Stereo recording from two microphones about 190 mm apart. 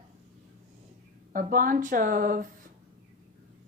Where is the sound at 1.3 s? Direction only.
45° right (ahead or behind).